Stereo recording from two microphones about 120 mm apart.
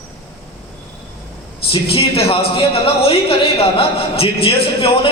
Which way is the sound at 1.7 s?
55° left (ahead or behind).